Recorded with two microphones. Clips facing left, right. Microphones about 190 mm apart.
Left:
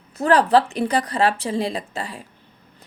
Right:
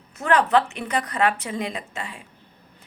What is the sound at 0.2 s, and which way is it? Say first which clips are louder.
A woman's voice: left 3 dB; 35° left (ahead or behind).